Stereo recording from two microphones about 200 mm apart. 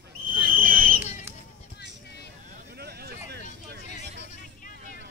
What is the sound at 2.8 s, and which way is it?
Vehicle, 50° right (ahead or behind).